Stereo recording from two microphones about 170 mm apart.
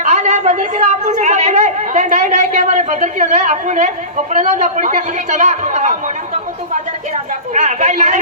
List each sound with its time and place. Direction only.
0.0 s speech: 45° right (ahead or behind)
7.5 s speech: 45° right (ahead or behind)